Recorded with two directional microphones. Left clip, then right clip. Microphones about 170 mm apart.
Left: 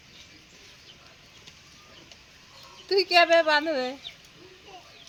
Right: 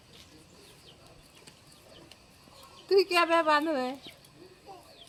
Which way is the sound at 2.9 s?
55° right (ahead or behind).